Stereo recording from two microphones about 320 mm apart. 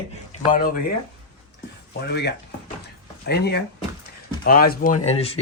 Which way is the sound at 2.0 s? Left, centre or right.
Left.